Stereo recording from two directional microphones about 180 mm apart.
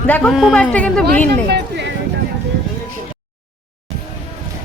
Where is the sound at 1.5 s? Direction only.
75° right (ahead or behind).